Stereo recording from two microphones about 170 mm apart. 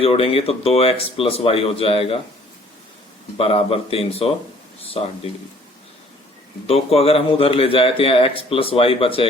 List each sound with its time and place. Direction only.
0.0 s a man's voice: 35° left (ahead or behind)
3.3 s a man's voice: 35° left (ahead or behind)
6.7 s a man's voice: 35° left (ahead or behind)